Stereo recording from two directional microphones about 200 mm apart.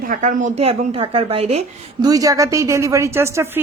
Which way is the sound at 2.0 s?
15° right (ahead or behind).